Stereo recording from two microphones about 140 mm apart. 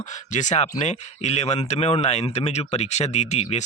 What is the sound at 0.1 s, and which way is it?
Speech, 60° left (ahead or behind).